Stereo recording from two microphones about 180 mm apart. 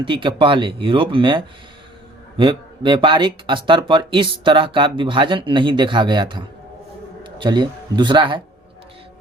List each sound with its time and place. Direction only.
0.0 s speech: 30° right (ahead or behind)